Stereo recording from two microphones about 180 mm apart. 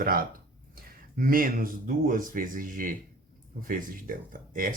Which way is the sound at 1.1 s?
50° right (ahead or behind).